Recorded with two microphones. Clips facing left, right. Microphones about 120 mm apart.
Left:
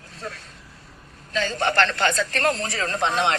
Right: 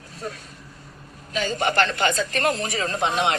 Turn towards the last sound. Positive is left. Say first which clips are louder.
# even
turn(degrees=-10)  # may be behind; listen again after turning